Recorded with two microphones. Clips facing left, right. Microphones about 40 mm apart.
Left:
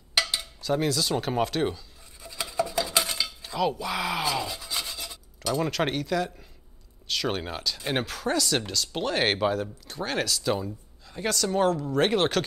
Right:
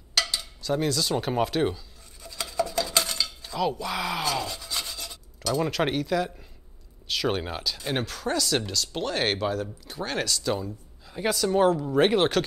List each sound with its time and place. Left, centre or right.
0.2 s a sound: centre
0.6 s speech: centre
2.2 s cutlery: centre
5.7 s speech: centre
7.8 s speech: centre
11.1 s speech: centre